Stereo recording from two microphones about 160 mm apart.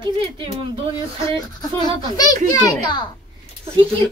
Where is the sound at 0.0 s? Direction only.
30° right (ahead or behind).